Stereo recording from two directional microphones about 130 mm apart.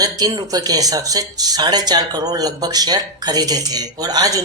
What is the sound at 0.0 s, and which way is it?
Speech, 30° right (ahead or behind).